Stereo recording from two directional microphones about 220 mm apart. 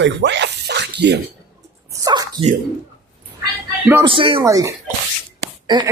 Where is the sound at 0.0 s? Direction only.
55° right (ahead or behind).